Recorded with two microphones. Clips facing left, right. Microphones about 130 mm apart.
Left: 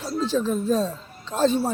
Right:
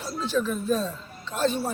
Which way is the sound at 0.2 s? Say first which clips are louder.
Left 3 dB; 35° left (ahead or behind).